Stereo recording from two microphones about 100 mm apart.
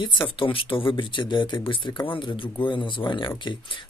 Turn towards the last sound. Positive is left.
turn(degrees=55)  # may be behind; listen again after turning